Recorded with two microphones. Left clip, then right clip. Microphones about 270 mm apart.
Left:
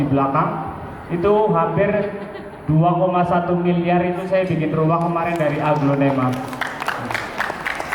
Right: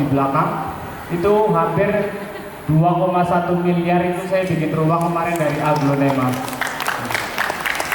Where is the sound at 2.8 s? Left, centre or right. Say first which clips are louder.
Even; left.